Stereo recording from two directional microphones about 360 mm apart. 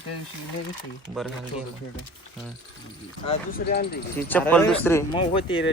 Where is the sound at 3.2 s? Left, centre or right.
Left.